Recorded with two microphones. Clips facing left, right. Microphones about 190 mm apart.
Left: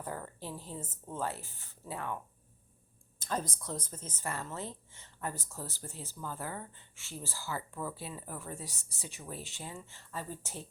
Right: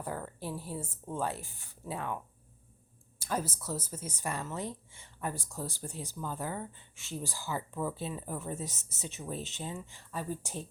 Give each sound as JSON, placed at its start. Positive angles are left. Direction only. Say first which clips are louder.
{"t": 0.0, "sound": "speech", "louder": "right 3 dB", "side_deg": -10}
{"t": 3.2, "sound": "speech", "louder": "right 2 dB", "side_deg": -10}